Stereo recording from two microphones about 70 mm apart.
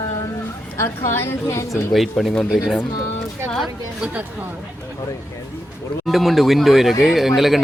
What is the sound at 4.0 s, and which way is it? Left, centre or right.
Speech, centre.